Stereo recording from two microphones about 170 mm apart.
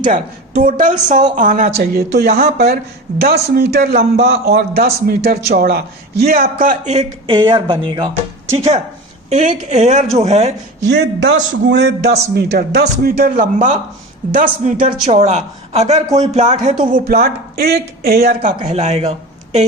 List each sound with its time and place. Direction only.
0.1 s a man's voice: 50° right (ahead or behind)
1.8 s a man's voice: 65° right (ahead or behind); by 10.5 s 40° right (ahead or behind)
10.8 s a man's voice: 90° right
12.3 s a man's voice: 70° right (ahead or behind); by 16.7 s 45° right (ahead or behind)
16.9 s speech: 65° right (ahead or behind)
18.6 s speech: 40° right (ahead or behind)